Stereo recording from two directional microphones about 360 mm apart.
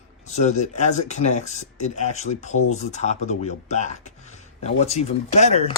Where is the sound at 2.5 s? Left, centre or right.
Left.